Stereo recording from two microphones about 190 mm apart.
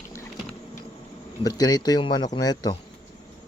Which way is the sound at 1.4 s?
20° left (ahead or behind).